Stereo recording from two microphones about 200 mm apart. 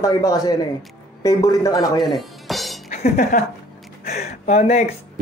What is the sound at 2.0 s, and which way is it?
Music, centre (ahead or behind).